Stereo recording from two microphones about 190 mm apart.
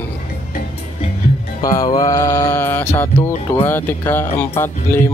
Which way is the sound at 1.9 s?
20° left (ahead or behind).